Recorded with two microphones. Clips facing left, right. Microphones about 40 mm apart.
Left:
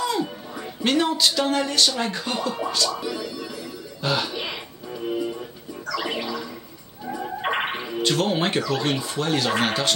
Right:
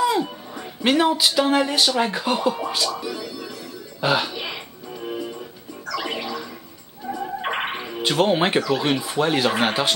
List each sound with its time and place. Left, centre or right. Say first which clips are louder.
0.0 s speech: right 4 dB; centre
2.9 s speech: even; centre
4.0 s speech: right 4 dB; centre
4.3 s music: even; centre
7.1 s gargling: even; centre
8.0 s speech: right 3 dB; centre